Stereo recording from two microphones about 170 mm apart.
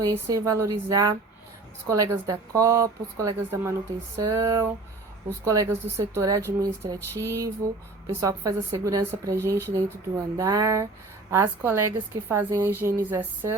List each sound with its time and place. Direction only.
0.0 s a woman's voice: 20° right (ahead or behind)